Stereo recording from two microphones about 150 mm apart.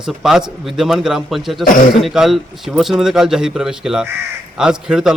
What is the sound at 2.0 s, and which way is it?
A man's voice, centre (ahead or behind).